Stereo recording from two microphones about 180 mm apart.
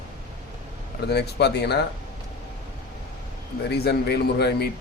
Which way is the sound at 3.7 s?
65° left (ahead or behind).